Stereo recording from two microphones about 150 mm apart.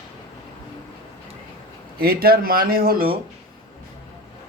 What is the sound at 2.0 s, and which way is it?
Speech, 85° right.